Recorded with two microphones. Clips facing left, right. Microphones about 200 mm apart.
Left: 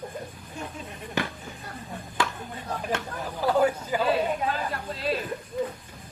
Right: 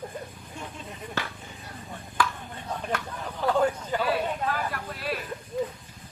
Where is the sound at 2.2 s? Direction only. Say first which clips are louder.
Right 1 dB; 25° left (ahead or behind).